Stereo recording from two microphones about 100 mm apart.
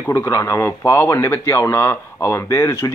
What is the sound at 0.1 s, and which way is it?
Speech, 30° left (ahead or behind).